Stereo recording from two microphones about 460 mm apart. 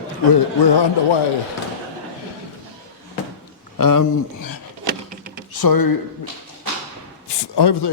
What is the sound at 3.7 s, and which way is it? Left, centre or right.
Speech, left.